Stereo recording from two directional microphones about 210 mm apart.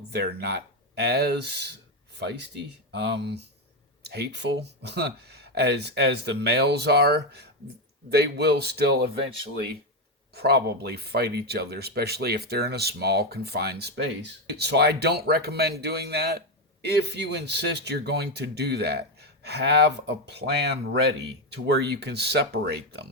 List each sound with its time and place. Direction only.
0.1 s speech: 50° right (ahead or behind)
2.9 s speech: 55° right (ahead or behind)
10.3 s speech: 50° right (ahead or behind)